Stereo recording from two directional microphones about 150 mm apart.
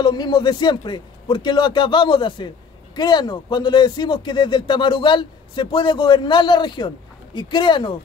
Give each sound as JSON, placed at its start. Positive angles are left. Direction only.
{"t": 0.0, "sound": "speech", "side_deg": 30}